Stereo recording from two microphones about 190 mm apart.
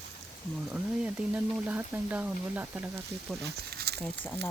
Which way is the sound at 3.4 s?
55° right (ahead or behind).